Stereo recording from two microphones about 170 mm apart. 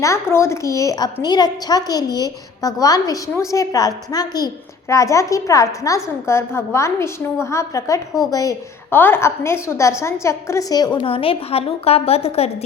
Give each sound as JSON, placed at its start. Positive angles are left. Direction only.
{"t": 0.0, "sound": "a woman's voice", "side_deg": 15}